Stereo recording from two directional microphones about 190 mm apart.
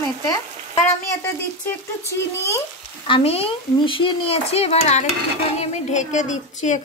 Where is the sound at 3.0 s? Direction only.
30° left (ahead or behind).